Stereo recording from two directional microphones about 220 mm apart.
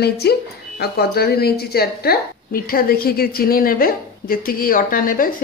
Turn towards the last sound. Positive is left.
turn(degrees=40)  # may be behind; listen again after turning